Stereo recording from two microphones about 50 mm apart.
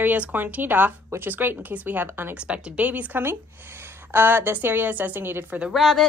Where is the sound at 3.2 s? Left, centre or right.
Right.